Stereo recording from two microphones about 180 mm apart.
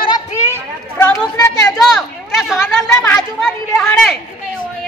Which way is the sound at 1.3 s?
20° left (ahead or behind).